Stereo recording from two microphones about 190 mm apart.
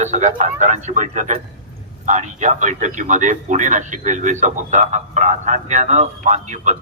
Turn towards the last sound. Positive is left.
turn(degrees=-40)  # may be behind; listen again after turning